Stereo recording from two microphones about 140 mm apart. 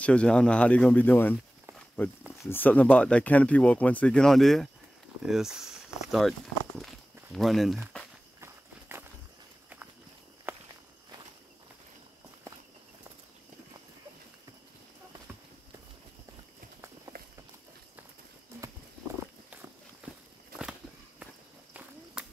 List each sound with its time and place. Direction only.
0.0 s speech: 5° left (ahead or behind)
2.4 s speech: 15° left (ahead or behind)
8.4 s walk: 15° right (ahead or behind)
10.5 s walk: 15° right (ahead or behind)
20.0 s walk: 10° right (ahead or behind)